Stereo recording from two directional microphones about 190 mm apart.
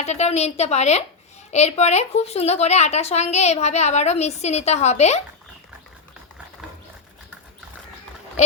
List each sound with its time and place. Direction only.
0.0 s a woman's voice: 35° left (ahead or behind)
8.4 s a woman's voice: 35° left (ahead or behind)